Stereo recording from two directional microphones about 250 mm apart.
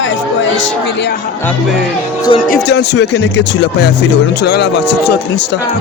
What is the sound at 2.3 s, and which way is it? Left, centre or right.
Speech, left.